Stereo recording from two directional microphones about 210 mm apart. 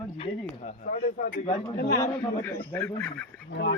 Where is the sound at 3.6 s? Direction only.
55° left (ahead or behind).